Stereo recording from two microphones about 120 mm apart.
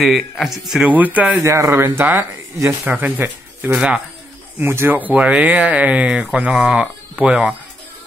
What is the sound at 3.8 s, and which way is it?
Speech, 5° right (ahead or behind).